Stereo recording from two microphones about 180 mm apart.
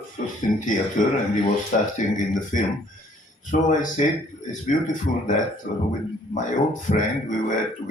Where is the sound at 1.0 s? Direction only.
45° left (ahead or behind).